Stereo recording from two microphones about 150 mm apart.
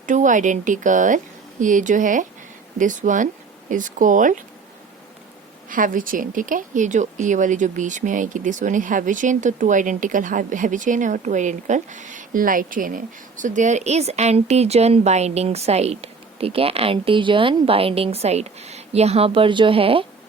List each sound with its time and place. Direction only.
0.0 s speech: 55° right (ahead or behind)
5.6 s speech: 65° right (ahead or behind); by 20.1 s 35° right (ahead or behind)